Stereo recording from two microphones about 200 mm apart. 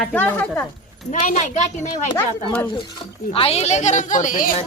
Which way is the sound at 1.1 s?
35° left (ahead or behind).